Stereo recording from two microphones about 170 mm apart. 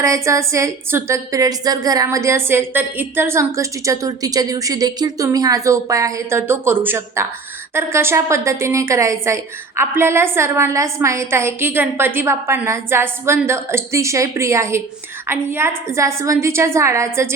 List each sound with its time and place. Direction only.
0.0 s a woman's voice: 20° right (ahead or behind)